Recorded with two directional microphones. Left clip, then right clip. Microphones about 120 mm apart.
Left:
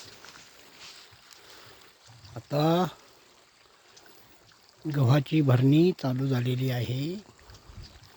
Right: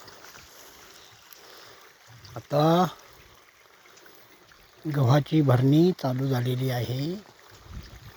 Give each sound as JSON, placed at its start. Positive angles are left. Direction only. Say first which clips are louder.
{"t": 2.3, "sound": "speech", "louder": "right 4 dB", "side_deg": 30}
{"t": 4.9, "sound": "speech", "louder": "right 3 dB", "side_deg": 35}